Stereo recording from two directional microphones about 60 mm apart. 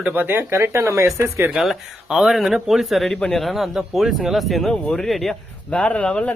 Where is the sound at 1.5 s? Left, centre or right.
Centre.